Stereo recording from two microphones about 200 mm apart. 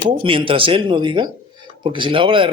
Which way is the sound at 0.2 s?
25° right (ahead or behind).